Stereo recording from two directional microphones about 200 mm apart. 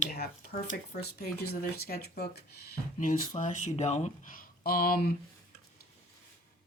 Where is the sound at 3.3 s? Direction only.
35° left (ahead or behind).